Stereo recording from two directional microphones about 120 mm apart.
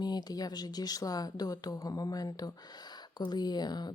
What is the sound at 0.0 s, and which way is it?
Speech, 35° left (ahead or behind).